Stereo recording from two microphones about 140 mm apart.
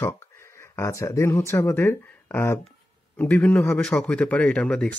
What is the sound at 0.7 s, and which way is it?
Speech, 20° left (ahead or behind).